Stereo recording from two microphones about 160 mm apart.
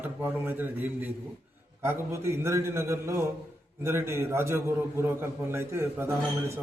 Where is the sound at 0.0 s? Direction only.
10° right (ahead or behind).